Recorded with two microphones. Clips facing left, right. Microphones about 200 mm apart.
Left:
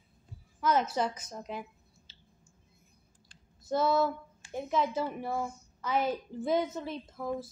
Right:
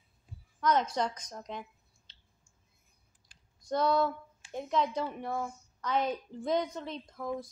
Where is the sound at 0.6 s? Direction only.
5° left (ahead or behind).